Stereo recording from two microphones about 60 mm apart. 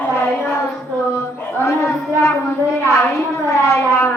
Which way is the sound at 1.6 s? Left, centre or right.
Left.